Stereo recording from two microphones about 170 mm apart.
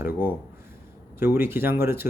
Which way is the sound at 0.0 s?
10° right (ahead or behind).